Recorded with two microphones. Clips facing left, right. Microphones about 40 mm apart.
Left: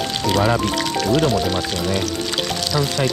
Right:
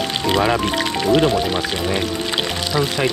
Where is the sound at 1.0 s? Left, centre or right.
Right.